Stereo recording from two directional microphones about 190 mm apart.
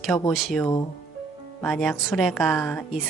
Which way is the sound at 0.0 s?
Centre (ahead or behind).